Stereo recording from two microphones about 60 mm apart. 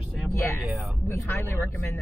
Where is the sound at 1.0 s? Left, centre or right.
Left.